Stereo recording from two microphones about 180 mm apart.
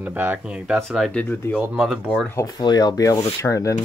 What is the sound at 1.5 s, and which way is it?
Speech, 5° right (ahead or behind).